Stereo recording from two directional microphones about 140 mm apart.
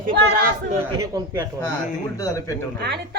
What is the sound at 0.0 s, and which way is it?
Speech, 80° right.